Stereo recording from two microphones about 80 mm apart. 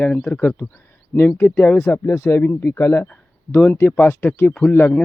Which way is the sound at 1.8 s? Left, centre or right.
Left.